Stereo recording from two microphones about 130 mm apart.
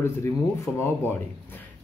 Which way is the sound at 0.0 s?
20° left (ahead or behind).